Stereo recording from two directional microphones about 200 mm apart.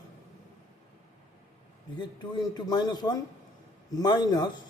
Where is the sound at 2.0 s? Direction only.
20° left (ahead or behind).